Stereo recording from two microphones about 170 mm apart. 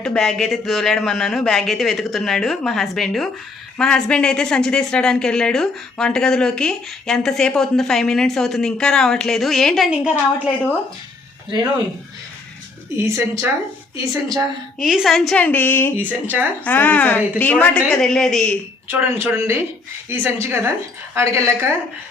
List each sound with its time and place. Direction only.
0.0 s a woman's voice: 5° left (ahead or behind)
10.3 s a woman's voice: 10° left (ahead or behind)
13.1 s a woman's voice: 15° right (ahead or behind)
14.8 s a woman's voice: centre (ahead or behind)
16.0 s speech: 10° right (ahead or behind)
16.6 s a woman's voice: 10° left (ahead or behind)
18.9 s speech: 15° right (ahead or behind)